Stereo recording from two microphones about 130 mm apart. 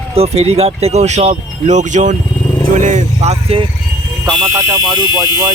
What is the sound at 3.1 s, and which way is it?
Speech, 50° right (ahead or behind).